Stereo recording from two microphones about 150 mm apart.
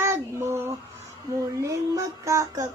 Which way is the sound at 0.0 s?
15° right (ahead or behind).